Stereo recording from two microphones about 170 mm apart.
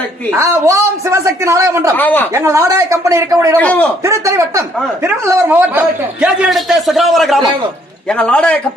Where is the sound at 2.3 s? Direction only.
15° right (ahead or behind).